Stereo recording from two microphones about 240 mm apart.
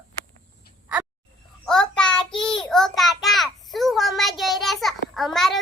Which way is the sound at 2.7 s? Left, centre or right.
Centre.